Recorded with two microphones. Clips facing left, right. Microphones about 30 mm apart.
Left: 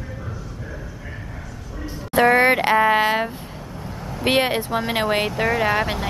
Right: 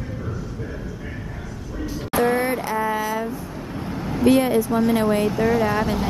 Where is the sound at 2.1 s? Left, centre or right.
Left.